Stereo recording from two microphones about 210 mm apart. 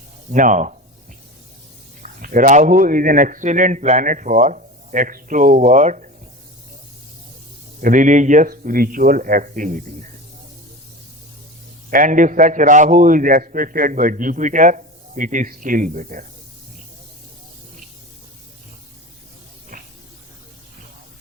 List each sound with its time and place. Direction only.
0.3 s a man's voice: 35° right (ahead or behind)
2.0 s a man's voice: 40° right (ahead or behind)
7.8 s a man's voice: 40° right (ahead or behind)
11.9 s a man's voice: 40° right (ahead or behind)
19.7 s a sound: 40° right (ahead or behind)